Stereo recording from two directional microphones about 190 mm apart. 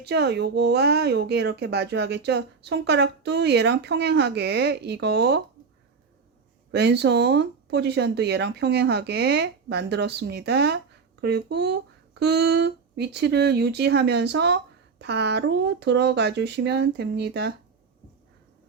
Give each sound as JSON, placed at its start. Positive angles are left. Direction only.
{"t": 0.0, "sound": "speech", "side_deg": -60}
{"t": 6.7, "sound": "speech", "side_deg": -60}